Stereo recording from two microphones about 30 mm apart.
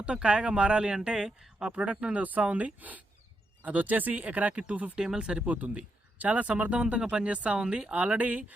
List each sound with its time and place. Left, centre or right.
0.0 s speech: right
1.1 s speech: right
1.7 s speech: right
2.1 s speech: right
5.1 s speech: right
5.5 s speech: right
7.6 s speech: right
7.9 s speech: right